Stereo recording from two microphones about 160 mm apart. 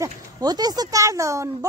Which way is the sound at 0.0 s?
25° right (ahead or behind).